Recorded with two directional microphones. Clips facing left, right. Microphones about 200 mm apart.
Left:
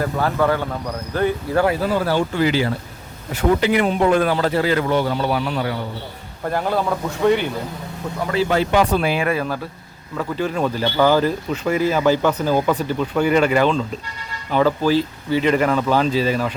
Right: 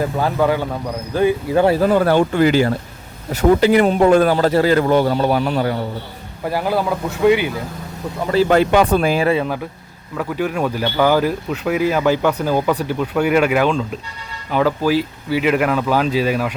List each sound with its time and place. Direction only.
0.0 s speech: 15° right (ahead or behind)
1.8 s speech: 55° right (ahead or behind)
6.4 s speech: 5° right (ahead or behind)
8.4 s speech: 55° right (ahead or behind)
9.2 s speech: 20° right (ahead or behind)
10.2 s speech: 10° right (ahead or behind)
12.1 s speech: centre (ahead or behind)